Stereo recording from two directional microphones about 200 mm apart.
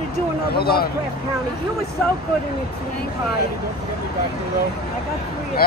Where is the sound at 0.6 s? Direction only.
50° left (ahead or behind).